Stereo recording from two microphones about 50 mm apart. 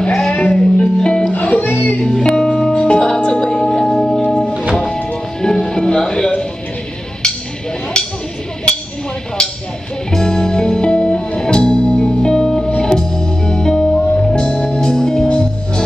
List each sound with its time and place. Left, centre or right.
0.0 s music: centre
1.3 s music: left
2.0 s music: centre
9.4 s a sound: centre
10.1 s music: centre